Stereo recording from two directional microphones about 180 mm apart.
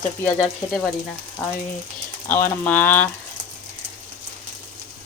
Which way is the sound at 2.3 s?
10° left (ahead or behind).